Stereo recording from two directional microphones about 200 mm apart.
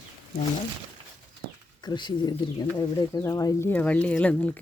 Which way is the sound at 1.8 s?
20° left (ahead or behind).